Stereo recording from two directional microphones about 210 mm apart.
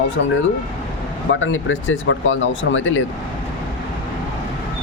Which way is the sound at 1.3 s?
65° left (ahead or behind).